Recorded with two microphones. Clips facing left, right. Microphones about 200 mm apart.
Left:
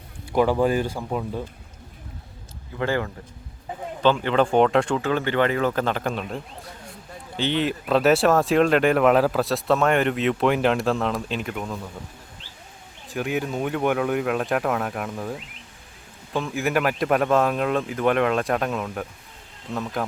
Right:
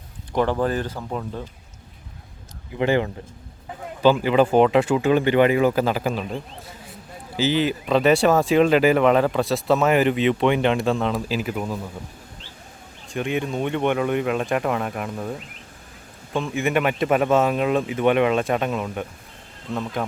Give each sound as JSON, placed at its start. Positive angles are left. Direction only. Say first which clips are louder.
{"t": 0.3, "sound": "speech", "louder": "left 2 dB", "side_deg": 10}
{"t": 2.7, "sound": "a man's voice", "louder": "right 4 dB", "side_deg": -20}
{"t": 4.0, "sound": "speech", "louder": "right 3 dB", "side_deg": -10}
{"t": 13.1, "sound": "speech", "louder": "right 1 dB", "side_deg": 5}